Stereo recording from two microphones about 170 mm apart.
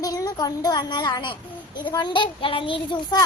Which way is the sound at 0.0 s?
20° left (ahead or behind).